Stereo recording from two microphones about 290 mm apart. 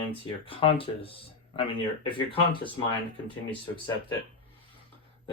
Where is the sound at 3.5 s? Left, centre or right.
Centre.